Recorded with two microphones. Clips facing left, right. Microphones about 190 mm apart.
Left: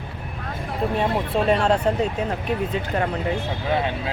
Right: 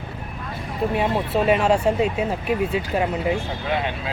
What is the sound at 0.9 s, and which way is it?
Speech, 5° right (ahead or behind).